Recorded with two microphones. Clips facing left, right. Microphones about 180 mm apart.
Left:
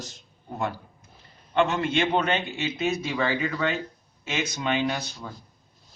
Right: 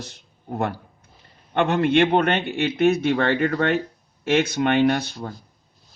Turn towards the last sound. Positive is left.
turn(degrees=-55)  # may be behind; listen again after turning